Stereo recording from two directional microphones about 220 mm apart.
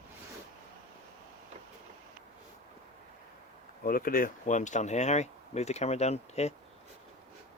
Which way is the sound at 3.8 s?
40° left (ahead or behind).